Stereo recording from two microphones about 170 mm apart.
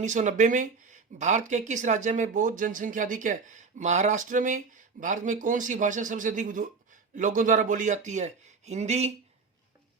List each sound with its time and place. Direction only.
0.0 s speech: 45° right (ahead or behind)